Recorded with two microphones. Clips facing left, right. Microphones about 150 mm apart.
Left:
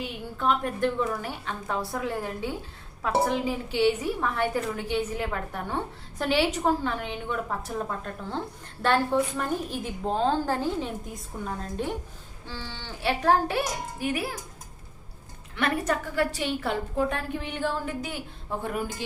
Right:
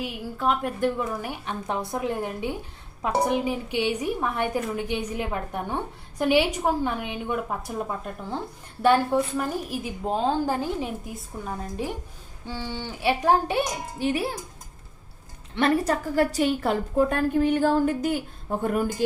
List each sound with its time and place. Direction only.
0.0 s a woman's voice: 5° right (ahead or behind); by 14.3 s 30° right (ahead or behind)
15.5 s a woman's voice: 30° right (ahead or behind); by 19.0 s 45° right (ahead or behind)